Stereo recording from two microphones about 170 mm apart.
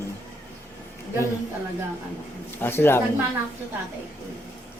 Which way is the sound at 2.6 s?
15° left (ahead or behind).